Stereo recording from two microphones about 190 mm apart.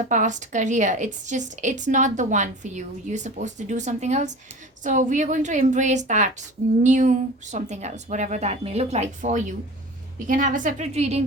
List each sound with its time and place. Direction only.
0.1 s a woman's voice: 40° right (ahead or behind)